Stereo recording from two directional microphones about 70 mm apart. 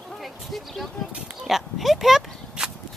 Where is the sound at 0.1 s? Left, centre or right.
Centre.